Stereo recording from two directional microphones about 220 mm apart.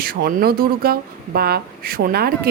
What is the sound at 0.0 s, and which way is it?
Speech, 40° right (ahead or behind).